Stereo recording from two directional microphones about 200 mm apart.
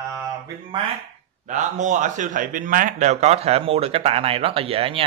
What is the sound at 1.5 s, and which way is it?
A man's voice, 40° right (ahead or behind).